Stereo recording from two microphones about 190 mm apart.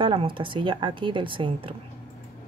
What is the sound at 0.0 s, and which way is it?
Speech, 25° right (ahead or behind).